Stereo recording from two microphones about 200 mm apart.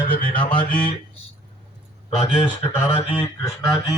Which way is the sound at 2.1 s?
25° left (ahead or behind).